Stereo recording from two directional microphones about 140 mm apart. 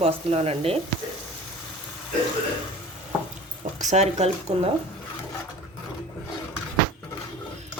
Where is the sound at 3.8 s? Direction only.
55° right (ahead or behind).